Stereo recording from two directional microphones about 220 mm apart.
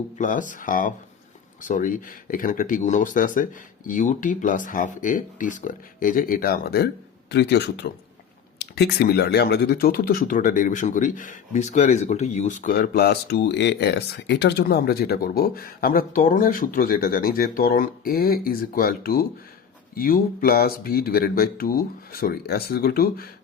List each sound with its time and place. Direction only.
0.2 s speech: 35° left (ahead or behind)